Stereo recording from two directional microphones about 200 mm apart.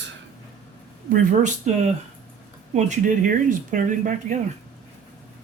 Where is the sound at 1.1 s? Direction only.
40° right (ahead or behind).